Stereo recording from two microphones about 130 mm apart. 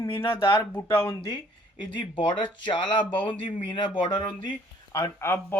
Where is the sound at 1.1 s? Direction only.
30° left (ahead or behind).